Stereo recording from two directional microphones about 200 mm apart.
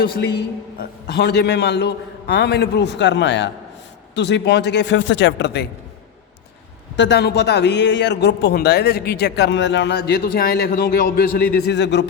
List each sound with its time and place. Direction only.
0.0 s a man's voice: 55° left (ahead or behind)
6.9 s a man's voice: 60° left (ahead or behind)